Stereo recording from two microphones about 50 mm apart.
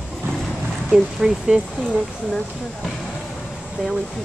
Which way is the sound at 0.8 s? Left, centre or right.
Centre.